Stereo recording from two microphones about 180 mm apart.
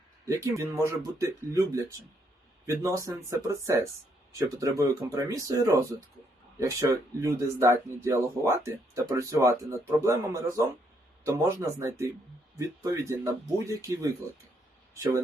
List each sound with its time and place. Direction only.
0.3 s speech: 15° right (ahead or behind)